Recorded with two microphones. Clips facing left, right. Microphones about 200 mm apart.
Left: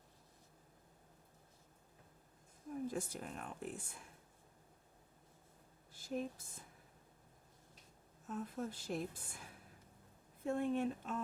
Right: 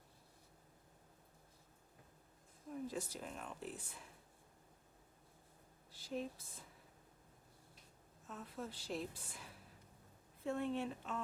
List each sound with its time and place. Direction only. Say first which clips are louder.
2.9 s a woman's voice: left 2 dB; 50° left (ahead or behind)
5.9 s a sound: left 2 dB; 45° left (ahead or behind)
8.3 s a woman's voice: left 5 dB; 45° left (ahead or behind)